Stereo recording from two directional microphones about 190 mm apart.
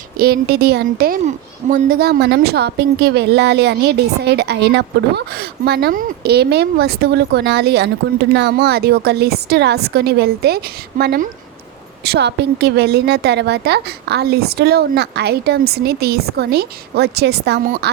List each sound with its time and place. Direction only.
0.2 s a woman's voice: 55° right (ahead or behind)